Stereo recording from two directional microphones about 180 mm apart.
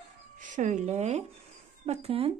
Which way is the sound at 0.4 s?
45° right (ahead or behind).